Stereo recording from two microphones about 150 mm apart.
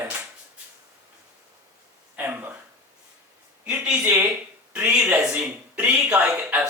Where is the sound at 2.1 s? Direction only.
10° right (ahead or behind).